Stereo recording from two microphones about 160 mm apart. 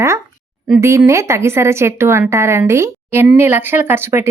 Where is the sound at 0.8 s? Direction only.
15° right (ahead or behind).